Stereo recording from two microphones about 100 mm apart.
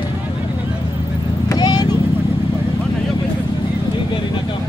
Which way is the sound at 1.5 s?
40° left (ahead or behind).